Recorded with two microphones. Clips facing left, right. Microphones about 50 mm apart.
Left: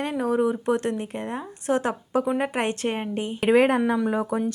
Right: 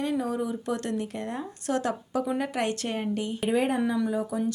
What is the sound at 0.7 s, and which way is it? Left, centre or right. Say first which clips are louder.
Speech: left 5 dB; left.